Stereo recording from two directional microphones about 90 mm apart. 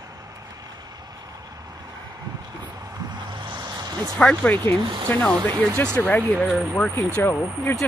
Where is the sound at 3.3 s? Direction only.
60° right (ahead or behind).